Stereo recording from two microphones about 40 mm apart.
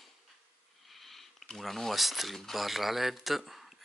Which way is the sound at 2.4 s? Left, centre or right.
Centre.